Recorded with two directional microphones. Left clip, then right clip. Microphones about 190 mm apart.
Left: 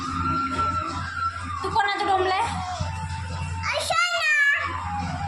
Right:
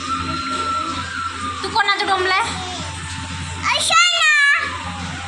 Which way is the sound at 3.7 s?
5° left (ahead or behind).